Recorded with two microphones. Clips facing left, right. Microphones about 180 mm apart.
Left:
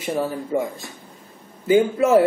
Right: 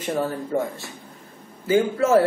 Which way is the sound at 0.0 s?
10° left (ahead or behind).